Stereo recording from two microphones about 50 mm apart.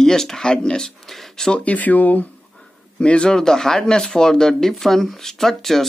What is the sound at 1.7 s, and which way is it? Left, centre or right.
Speech, left.